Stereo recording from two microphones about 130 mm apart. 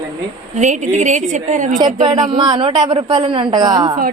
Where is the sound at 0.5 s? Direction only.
65° right (ahead or behind).